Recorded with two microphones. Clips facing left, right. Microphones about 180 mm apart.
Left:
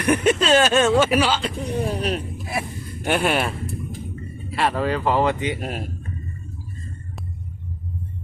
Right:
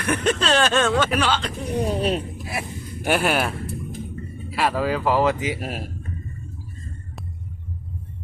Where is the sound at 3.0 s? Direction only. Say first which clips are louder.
Even; 5° right (ahead or behind).